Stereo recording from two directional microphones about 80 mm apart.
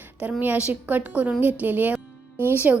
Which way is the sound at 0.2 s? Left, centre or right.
Centre.